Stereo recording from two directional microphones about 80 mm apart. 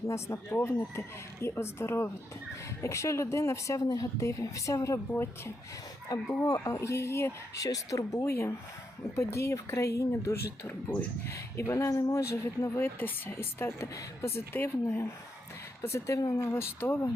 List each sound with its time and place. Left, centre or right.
0.1 s speech: left
3.8 s speech: left